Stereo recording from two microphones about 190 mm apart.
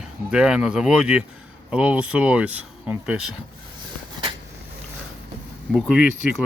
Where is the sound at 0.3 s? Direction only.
5° right (ahead or behind).